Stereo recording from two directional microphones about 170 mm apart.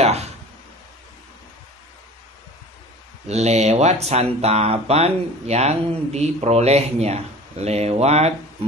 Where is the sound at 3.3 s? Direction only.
40° right (ahead or behind).